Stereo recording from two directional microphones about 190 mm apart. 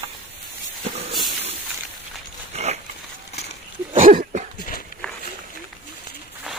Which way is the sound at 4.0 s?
45° right (ahead or behind).